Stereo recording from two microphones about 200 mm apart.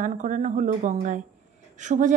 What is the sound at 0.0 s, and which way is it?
Speech, 40° right (ahead or behind).